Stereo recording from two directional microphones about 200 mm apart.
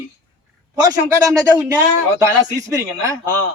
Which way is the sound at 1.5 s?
15° right (ahead or behind).